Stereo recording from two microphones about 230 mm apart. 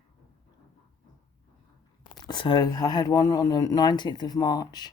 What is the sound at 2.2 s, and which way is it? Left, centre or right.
Speech, left.